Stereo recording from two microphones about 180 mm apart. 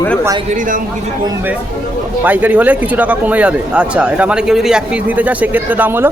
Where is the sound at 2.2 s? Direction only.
10° right (ahead or behind).